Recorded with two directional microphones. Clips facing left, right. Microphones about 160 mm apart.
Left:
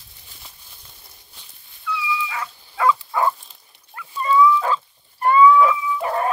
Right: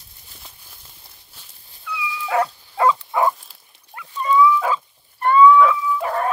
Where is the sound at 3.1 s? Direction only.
20° right (ahead or behind).